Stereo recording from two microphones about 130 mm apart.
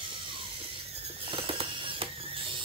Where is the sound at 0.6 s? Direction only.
45° right (ahead or behind).